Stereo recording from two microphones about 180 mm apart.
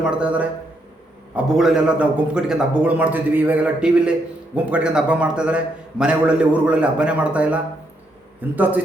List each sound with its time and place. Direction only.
0.0 s a man's voice: 5° right (ahead or behind)
1.5 s a man's voice: 5° right (ahead or behind)